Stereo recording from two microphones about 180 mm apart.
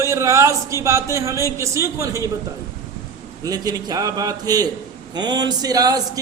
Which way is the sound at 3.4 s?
20° right (ahead or behind).